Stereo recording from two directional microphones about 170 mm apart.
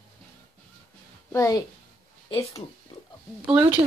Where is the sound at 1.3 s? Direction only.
20° left (ahead or behind).